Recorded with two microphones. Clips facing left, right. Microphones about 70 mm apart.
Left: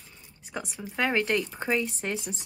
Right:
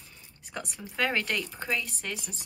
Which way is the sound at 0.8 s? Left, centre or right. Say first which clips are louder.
Left 3 dB; centre.